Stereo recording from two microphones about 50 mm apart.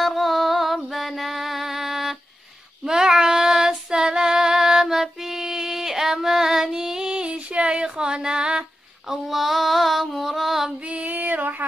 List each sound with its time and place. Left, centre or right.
0.0 s music: centre
2.8 s child singing: centre
9.1 s female singing: centre
10.9 s female singing: right